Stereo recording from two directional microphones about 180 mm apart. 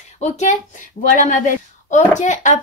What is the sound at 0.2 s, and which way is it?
Speech, 40° left (ahead or behind).